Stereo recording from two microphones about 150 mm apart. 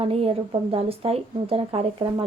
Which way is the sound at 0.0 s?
40° right (ahead or behind).